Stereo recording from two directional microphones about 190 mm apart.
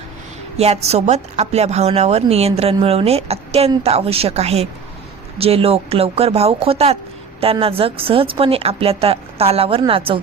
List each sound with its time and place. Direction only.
0.5 s a woman's voice: 35° right (ahead or behind)